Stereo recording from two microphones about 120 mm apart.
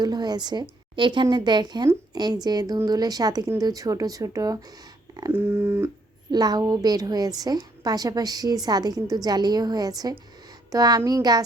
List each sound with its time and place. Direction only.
0.0 s a woman's voice: 35° right (ahead or behind)
5.3 s speech: 20° right (ahead or behind)
6.3 s a woman's voice: 35° right (ahead or behind)